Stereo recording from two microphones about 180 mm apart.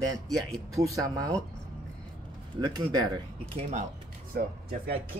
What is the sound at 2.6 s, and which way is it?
Speech, 25° right (ahead or behind).